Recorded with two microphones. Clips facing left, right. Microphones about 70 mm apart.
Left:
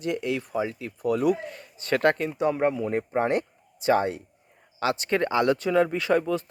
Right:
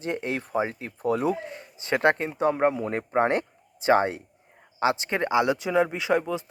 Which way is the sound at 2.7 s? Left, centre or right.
Right.